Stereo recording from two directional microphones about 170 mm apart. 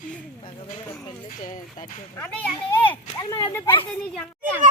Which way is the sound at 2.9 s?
25° left (ahead or behind).